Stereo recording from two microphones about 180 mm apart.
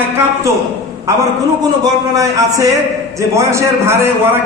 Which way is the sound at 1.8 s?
20° right (ahead or behind).